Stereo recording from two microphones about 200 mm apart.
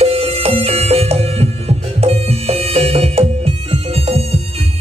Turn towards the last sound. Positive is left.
turn(degrees=-30)  # may be behind; listen again after turning